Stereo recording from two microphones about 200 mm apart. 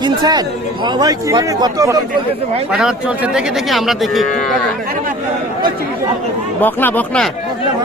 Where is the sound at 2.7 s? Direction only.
5° right (ahead or behind).